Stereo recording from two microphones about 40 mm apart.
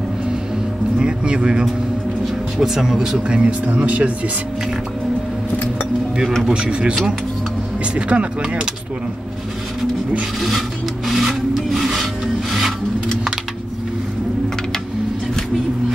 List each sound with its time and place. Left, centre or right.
0.9 s speech: right
2.6 s speech: centre
3.3 s speech: right
6.6 s speech: right
11.2 s filing: centre